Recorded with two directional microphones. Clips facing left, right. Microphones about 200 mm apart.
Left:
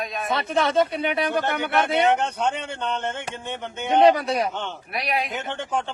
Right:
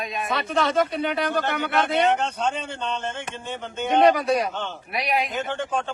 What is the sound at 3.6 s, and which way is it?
A man's voice, 20° left (ahead or behind).